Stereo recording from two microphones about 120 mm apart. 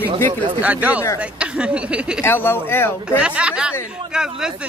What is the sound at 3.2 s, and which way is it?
Speech, 10° right (ahead or behind).